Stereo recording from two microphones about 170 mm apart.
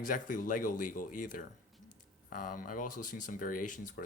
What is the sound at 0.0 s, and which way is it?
Speech, 50° left (ahead or behind).